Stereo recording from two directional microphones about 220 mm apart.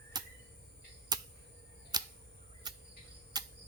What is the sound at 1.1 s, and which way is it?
Finger snapping, 20° right (ahead or behind).